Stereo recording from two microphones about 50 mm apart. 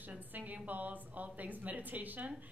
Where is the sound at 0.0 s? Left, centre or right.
Right.